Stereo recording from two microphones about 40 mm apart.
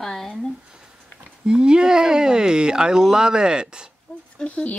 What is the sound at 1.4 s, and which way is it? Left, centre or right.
Speech, right.